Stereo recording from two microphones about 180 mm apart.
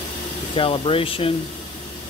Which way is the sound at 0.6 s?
30° left (ahead or behind).